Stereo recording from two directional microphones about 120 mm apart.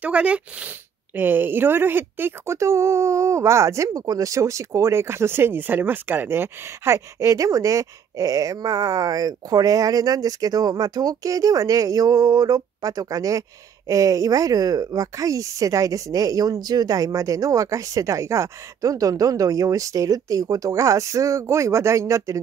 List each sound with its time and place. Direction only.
0.0 s speech: 10° right (ahead or behind); by 22.4 s 25° right (ahead or behind)